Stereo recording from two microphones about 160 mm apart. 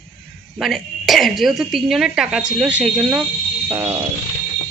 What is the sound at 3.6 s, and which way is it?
Music, 15° right (ahead or behind).